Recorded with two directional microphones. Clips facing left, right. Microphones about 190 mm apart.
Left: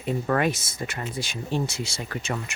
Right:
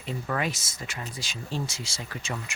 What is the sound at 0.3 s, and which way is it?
Speech, 55° left (ahead or behind).